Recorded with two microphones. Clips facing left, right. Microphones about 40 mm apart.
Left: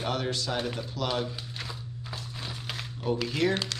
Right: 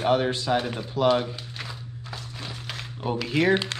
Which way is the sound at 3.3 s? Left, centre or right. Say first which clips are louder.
Right 8 dB; right.